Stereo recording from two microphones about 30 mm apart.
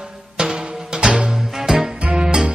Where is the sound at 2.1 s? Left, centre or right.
Right.